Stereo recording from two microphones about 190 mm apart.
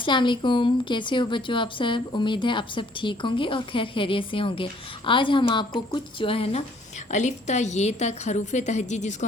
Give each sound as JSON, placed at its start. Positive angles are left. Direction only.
{"t": 0.0, "sound": "a woman's voice", "side_deg": 25}